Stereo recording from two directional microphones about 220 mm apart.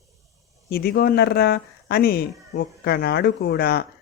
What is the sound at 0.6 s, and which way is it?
Speech, 45° left (ahead or behind).